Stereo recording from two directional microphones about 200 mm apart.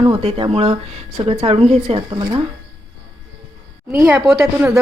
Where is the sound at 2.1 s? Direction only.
20° right (ahead or behind).